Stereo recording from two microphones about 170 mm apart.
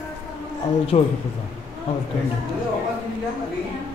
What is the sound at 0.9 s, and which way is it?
Speech, 35° left (ahead or behind).